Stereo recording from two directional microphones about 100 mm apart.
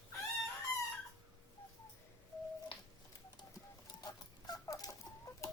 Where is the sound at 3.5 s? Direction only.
40° left (ahead or behind).